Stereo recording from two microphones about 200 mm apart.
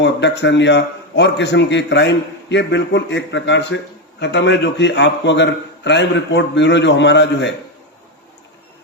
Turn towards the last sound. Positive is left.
turn(degrees=60)  # may be behind; listen again after turning